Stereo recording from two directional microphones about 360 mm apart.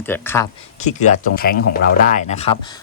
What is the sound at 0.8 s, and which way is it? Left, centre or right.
Speech, centre.